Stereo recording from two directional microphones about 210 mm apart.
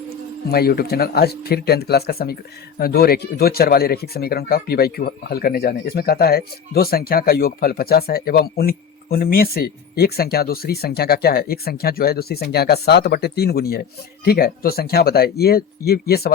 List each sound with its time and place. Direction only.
0.4 s speech: 50° left (ahead or behind)